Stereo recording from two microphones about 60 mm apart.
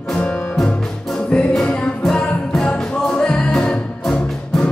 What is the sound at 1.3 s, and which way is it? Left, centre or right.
Music, centre.